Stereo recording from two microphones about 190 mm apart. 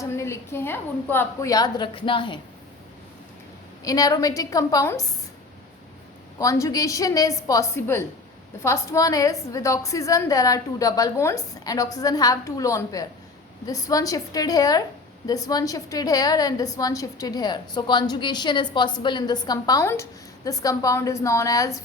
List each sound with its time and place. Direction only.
0.0 s a woman's voice: 15° left (ahead or behind)
3.8 s a woman's voice: 20° left (ahead or behind)
6.4 s a woman's voice: 15° left (ahead or behind)